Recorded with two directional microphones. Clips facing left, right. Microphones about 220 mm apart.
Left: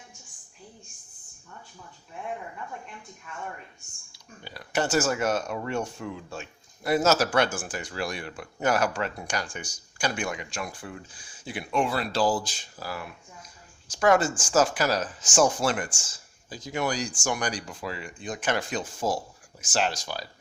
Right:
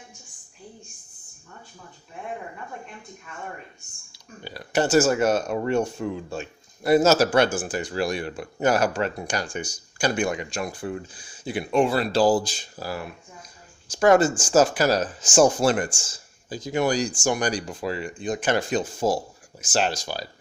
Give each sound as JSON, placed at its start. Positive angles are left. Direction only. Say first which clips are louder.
{"t": 4.4, "sound": "speech", "louder": "right 5 dB", "side_deg": -35}